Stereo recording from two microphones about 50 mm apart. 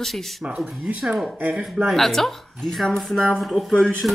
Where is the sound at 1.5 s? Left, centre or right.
Centre.